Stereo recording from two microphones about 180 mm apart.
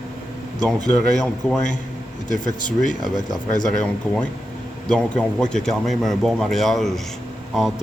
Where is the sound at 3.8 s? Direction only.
5° left (ahead or behind).